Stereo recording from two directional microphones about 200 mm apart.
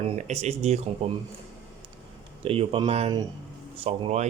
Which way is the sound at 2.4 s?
30° right (ahead or behind).